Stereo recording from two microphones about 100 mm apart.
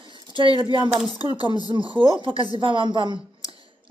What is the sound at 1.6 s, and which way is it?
Speech, 55° right (ahead or behind).